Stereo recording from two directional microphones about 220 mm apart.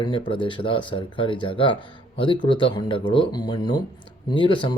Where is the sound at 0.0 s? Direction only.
20° left (ahead or behind).